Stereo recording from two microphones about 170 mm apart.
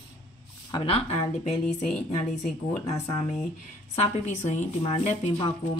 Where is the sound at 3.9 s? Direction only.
40° left (ahead or behind).